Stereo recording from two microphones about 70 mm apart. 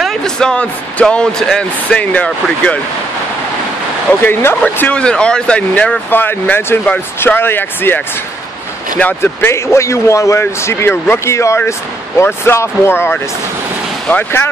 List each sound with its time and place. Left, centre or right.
0.0 s speech: centre
4.2 s speech: left
5.0 s speech: centre
6.0 s speech: left
9.2 s speech: left